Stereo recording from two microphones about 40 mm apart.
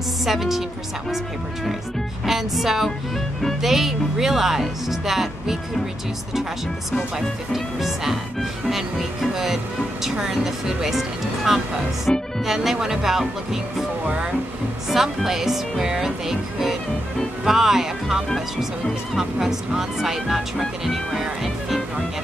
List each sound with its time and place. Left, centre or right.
0.2 s speech: centre
6.9 s speech: centre
12.1 s music: left
12.4 s speech: centre
14.0 s speech: right
14.9 s speech: centre